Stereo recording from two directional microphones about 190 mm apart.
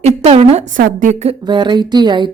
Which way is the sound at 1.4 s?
25° right (ahead or behind).